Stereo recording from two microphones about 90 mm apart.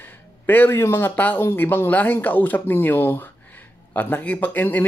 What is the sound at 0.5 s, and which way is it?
Speech, 25° left (ahead or behind).